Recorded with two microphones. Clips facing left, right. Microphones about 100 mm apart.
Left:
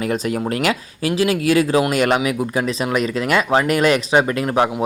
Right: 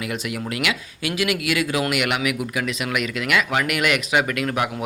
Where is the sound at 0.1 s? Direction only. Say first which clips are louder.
Left 7 dB; 40° left (ahead or behind).